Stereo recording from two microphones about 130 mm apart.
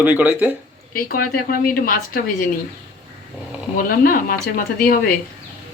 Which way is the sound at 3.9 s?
90° left.